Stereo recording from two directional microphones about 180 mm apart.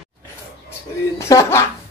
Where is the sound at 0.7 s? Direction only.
15° left (ahead or behind).